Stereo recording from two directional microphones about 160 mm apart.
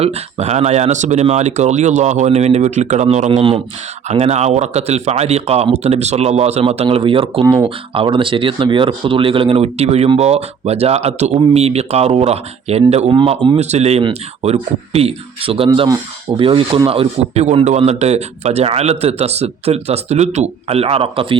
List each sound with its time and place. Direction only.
0.0 s a man's voice: 40° right (ahead or behind)